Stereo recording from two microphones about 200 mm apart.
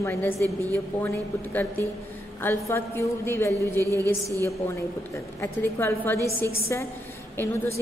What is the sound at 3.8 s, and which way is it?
Speech, 15° right (ahead or behind).